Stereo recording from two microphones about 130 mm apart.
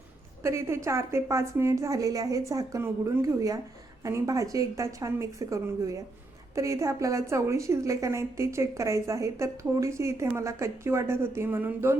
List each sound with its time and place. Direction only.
0.4 s a woman's voice: 20° right (ahead or behind)